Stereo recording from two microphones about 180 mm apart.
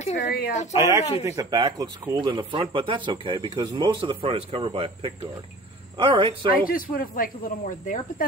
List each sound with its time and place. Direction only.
0.0 s a sound: 40° left (ahead or behind)
0.7 s speech: 15° right (ahead or behind)
6.5 s speech: 50° left (ahead or behind)